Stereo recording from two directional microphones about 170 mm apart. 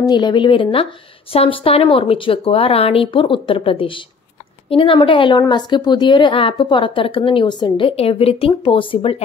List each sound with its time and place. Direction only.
0.0 s a woman's voice: 25° left (ahead or behind)